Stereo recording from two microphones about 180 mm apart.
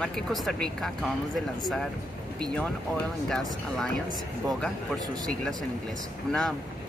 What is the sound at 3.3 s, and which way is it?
Speech, centre (ahead or behind).